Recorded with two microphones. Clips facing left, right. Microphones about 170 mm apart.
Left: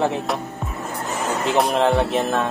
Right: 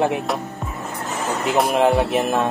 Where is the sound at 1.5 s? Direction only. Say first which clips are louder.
Right 1 dB; 5° right (ahead or behind).